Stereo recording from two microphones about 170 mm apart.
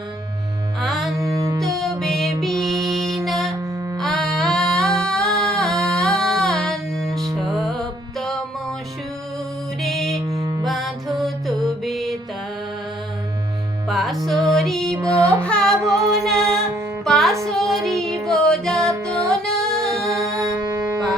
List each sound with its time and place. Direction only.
0.8 s music: centre (ahead or behind)
1.2 s music: 20° right (ahead or behind)
1.6 s music: centre (ahead or behind)
9.8 s music: centre (ahead or behind)
10.2 s music: 20° right (ahead or behind)
10.7 s music: centre (ahead or behind)
13.8 s music: centre (ahead or behind)
14.9 s music: 15° right (ahead or behind)
15.4 s music: 5° left (ahead or behind)
20.1 s music: 15° right (ahead or behind)